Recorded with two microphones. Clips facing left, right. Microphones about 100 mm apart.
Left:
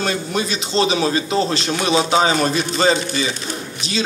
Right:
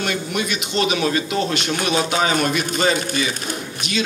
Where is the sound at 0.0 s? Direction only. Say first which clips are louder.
Left 2 dB; 30° left (ahead or behind).